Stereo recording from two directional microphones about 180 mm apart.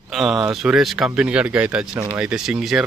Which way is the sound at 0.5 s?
5° right (ahead or behind).